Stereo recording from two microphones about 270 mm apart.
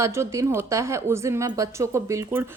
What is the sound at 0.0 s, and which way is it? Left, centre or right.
A woman's voice, centre.